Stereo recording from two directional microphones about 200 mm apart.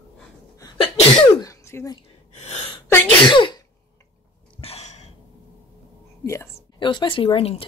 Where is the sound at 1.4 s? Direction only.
15° left (ahead or behind).